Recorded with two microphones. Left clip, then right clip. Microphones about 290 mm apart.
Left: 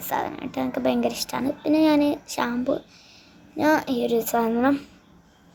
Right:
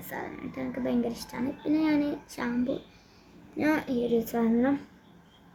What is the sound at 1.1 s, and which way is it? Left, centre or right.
Speech, left.